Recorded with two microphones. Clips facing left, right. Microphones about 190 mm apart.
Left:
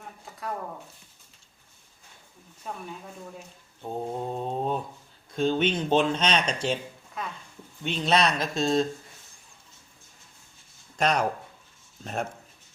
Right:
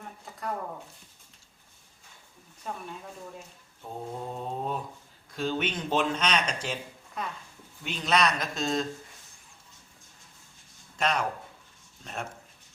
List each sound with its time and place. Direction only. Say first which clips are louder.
2.6 s speech: even; centre (ahead or behind)
3.8 s speech: left 5 dB; 30° left (ahead or behind)
7.2 s speech: even; centre (ahead or behind)
7.9 s speech: left 2 dB; 30° left (ahead or behind)
10.9 s speech: left 4 dB; 40° left (ahead or behind)